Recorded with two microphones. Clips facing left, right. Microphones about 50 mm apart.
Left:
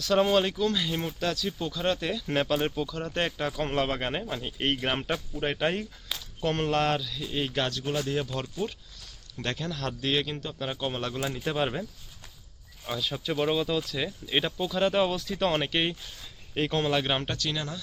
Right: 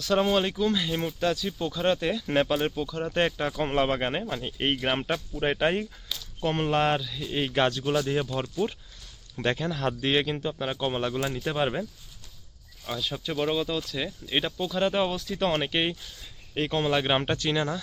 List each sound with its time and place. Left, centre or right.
0.0 s speech: centre
12.9 s speech: centre; by 17.7 s right